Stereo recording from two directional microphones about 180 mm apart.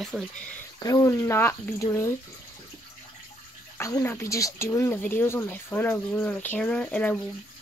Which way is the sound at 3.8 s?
15° left (ahead or behind).